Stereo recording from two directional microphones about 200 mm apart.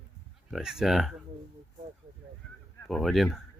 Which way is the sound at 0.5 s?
Centre (ahead or behind).